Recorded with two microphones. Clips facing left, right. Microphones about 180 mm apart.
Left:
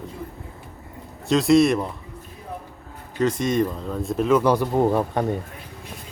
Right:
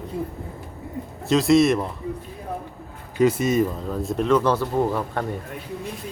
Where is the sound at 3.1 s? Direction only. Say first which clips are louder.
Right 2 dB; 5° right (ahead or behind); by 5.2 s 20° left (ahead or behind).